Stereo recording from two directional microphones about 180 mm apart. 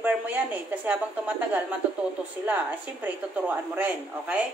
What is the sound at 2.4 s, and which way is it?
Speech, 10° right (ahead or behind).